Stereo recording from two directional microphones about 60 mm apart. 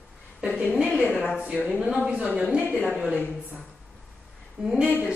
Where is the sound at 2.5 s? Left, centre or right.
Right.